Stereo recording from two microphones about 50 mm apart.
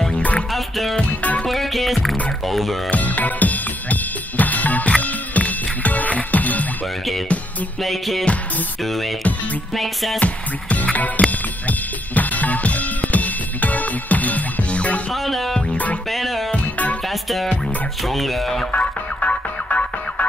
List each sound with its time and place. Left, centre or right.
0.1 s music: left
0.5 s music: centre
2.4 s speech: centre
2.9 s drum kit: left
7.8 s speech: centre
10.1 s music: left
11.2 s drum kit: left
15.2 s speech: centre
15.7 s music: left
16.1 s music: centre
16.5 s music: left
18.0 s speech: centre
18.7 s music: left